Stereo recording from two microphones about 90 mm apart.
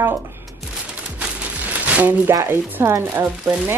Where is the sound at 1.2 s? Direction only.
15° right (ahead or behind).